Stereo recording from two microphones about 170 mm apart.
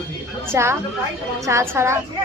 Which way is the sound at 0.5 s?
15° right (ahead or behind).